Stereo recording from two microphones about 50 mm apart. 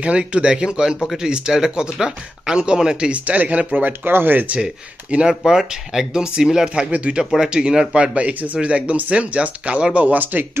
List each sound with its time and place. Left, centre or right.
0.0 s speech: right
3.3 s speech: right
5.3 s speech: centre
7.9 s speech: right